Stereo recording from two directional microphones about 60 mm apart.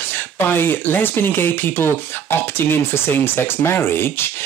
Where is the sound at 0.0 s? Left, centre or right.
Left.